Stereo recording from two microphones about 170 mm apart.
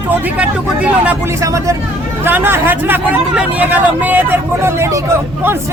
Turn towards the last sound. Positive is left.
turn(degrees=-15)  # may be behind; listen again after turning